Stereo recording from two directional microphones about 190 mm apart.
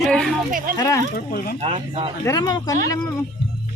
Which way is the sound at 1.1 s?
50° left (ahead or behind).